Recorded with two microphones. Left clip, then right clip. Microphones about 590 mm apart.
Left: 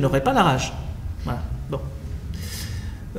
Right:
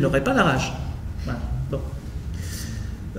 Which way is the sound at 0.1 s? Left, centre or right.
Left.